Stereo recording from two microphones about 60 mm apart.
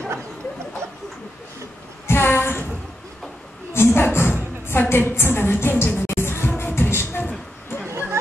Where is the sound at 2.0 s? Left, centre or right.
Left.